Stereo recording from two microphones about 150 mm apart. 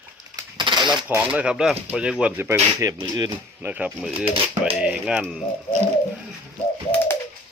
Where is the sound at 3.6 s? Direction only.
10° right (ahead or behind).